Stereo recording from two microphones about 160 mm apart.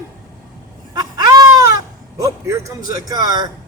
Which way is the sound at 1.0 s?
25° right (ahead or behind).